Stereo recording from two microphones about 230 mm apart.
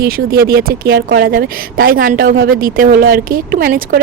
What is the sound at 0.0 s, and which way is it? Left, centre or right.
Speech, right.